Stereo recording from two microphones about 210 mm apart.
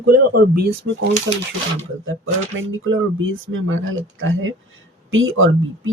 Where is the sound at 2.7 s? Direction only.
65° right (ahead or behind).